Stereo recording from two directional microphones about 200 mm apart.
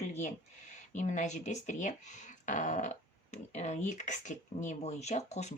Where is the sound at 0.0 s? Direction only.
35° left (ahead or behind).